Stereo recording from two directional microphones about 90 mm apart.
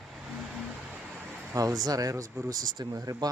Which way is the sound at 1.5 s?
45° right (ahead or behind).